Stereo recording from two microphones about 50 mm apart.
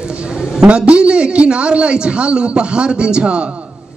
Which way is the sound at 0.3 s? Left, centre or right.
Centre.